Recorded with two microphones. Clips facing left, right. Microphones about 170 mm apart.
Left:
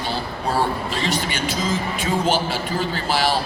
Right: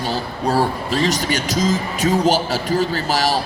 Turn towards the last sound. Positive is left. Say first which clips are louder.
# right 2 dB
turn(degrees=-40)  # may be behind; listen again after turning